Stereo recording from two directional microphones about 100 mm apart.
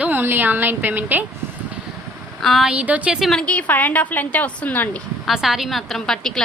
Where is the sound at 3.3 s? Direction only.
10° left (ahead or behind).